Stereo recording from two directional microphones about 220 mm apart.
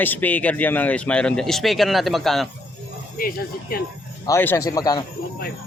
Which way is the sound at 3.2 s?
40° left (ahead or behind).